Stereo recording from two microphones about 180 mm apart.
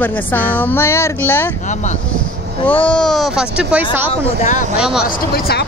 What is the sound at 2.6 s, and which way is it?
Speech, 10° left (ahead or behind).